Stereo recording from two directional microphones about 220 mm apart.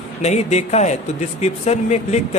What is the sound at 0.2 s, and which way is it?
A man's voice, 30° left (ahead or behind).